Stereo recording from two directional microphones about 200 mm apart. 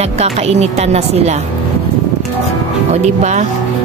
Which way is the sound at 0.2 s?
30° right (ahead or behind).